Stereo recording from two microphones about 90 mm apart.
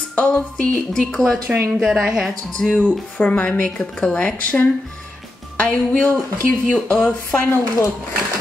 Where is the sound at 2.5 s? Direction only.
20° left (ahead or behind).